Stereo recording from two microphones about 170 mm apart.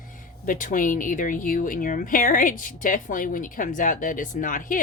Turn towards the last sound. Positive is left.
turn(degrees=55)  # may be behind; listen again after turning